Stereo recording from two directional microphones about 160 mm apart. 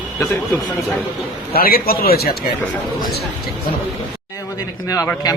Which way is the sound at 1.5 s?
70° left (ahead or behind).